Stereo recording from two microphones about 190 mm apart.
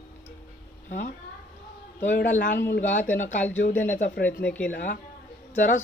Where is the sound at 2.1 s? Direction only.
45° left (ahead or behind).